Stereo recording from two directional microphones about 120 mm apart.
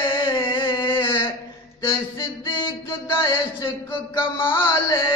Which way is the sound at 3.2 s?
40° left (ahead or behind).